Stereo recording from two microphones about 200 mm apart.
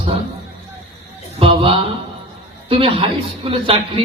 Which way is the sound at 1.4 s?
30° right (ahead or behind).